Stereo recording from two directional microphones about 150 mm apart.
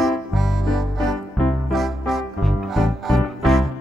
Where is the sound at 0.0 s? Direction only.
Centre (ahead or behind).